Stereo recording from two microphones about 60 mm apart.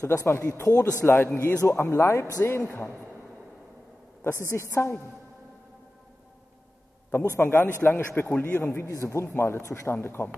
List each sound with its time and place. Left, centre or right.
0.0 s a man's voice: left
1.0 s a man's voice: left
4.2 s speech: left
7.1 s a man's voice: left
8.9 s speech: left
10.0 s a man's voice: left